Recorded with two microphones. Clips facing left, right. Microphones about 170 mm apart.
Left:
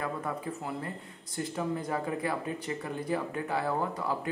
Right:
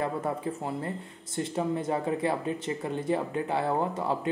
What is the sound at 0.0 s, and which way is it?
Speech, 30° right (ahead or behind).